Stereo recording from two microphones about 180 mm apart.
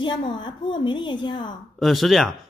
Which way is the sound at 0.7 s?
25° left (ahead or behind).